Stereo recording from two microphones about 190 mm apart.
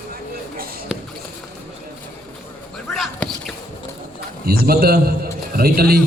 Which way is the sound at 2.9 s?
Centre (ahead or behind).